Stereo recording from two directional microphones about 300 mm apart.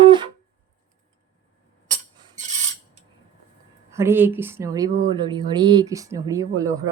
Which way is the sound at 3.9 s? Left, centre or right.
Centre.